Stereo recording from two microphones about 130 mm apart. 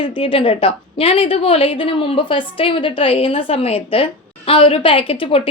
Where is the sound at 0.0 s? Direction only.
40° left (ahead or behind).